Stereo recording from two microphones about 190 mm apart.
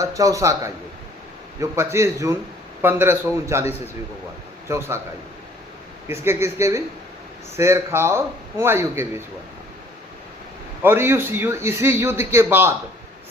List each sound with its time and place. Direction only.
0.0 s a man's voice: 15° right (ahead or behind)
1.7 s a man's voice: 15° right (ahead or behind)
6.1 s a man's voice: 15° right (ahead or behind)
10.8 s a man's voice: 10° right (ahead or behind)